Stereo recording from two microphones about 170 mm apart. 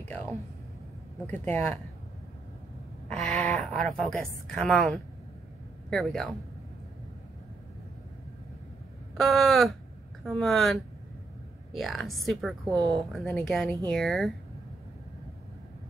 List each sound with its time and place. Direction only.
1.4 s speech: 10° left (ahead or behind)
3.1 s a sound: 5° left (ahead or behind)
4.6 s speech: 5° left (ahead or behind)
9.1 s speech: centre (ahead or behind)
12.6 s speech: 20° right (ahead or behind)
12.9 s speech: centre (ahead or behind)